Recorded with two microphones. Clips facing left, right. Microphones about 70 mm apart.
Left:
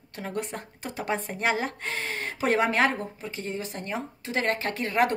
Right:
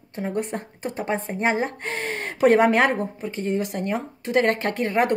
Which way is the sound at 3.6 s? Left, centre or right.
Right.